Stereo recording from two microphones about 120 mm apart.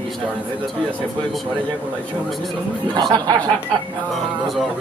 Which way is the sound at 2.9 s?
35° right (ahead or behind).